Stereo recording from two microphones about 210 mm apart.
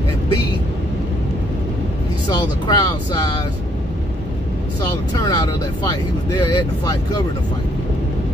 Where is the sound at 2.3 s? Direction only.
20° left (ahead or behind).